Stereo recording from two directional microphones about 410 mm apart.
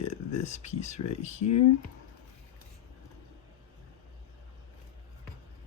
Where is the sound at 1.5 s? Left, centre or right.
Left.